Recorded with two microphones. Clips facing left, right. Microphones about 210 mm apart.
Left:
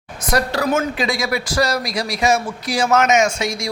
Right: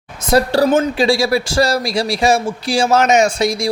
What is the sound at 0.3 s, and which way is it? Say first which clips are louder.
Speech: right 6 dB; 30° right (ahead or behind).